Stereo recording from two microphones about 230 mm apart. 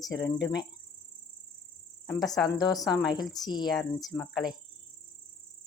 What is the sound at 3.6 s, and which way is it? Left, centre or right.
Speech, centre.